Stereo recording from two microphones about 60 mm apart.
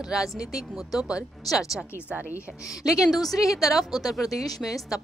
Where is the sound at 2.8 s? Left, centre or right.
Left.